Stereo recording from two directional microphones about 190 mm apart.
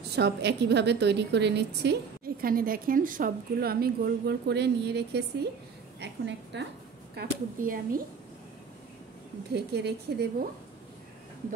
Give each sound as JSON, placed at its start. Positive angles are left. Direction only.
{"t": 0.1, "sound": "a woman's voice", "side_deg": -60}
{"t": 7.2, "sound": "speech", "side_deg": -50}
{"t": 9.5, "sound": "a woman's voice", "side_deg": -60}